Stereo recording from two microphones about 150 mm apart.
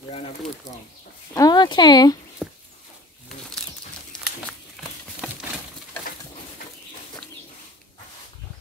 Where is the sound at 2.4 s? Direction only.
5° right (ahead or behind).